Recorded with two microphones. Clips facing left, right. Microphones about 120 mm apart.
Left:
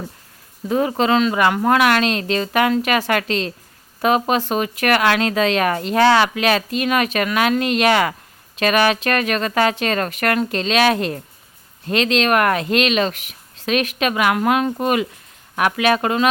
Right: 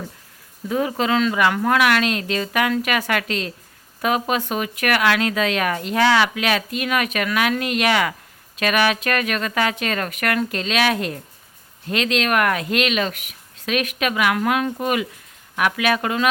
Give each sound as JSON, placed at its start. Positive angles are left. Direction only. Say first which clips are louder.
{"t": 0.7, "sound": "speech", "louder": "left 3 dB", "side_deg": 35}